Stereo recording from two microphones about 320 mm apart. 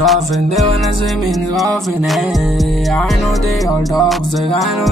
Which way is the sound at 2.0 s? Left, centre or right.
Centre.